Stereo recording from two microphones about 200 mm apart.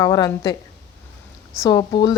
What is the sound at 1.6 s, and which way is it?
Speech, 20° left (ahead or behind).